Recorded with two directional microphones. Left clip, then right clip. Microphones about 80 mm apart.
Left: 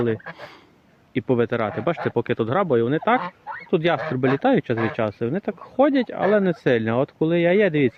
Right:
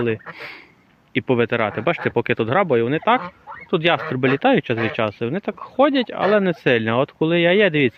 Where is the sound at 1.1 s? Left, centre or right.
Centre.